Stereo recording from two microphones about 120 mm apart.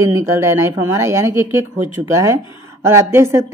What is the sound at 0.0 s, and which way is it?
Speech, 25° right (ahead or behind).